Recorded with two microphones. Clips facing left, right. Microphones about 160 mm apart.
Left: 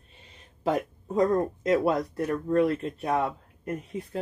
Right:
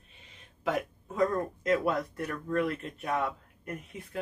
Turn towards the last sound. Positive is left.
turn(degrees=35)  # may be behind; listen again after turning